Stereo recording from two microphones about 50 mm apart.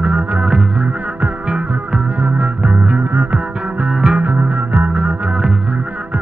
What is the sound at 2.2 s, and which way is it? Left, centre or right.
Music, right.